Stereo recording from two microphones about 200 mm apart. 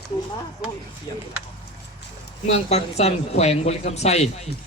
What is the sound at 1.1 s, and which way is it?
Speech, 20° left (ahead or behind).